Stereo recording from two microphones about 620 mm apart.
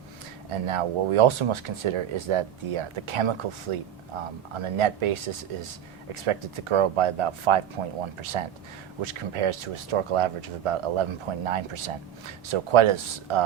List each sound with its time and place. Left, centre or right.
0.5 s speech: right